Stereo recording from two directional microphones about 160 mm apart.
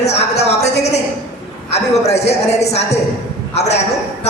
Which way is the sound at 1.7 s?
40° left (ahead or behind).